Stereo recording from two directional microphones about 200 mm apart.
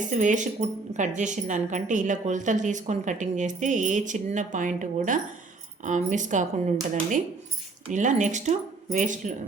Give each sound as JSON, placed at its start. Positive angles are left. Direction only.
{"t": 0.0, "sound": "a woman's voice", "side_deg": -40}
{"t": 7.9, "sound": "a woman's voice", "side_deg": -40}